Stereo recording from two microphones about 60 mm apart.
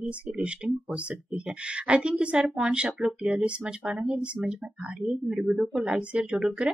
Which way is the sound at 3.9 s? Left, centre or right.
Centre.